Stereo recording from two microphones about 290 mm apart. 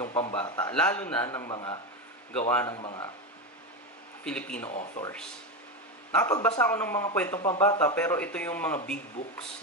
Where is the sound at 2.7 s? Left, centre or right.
Centre.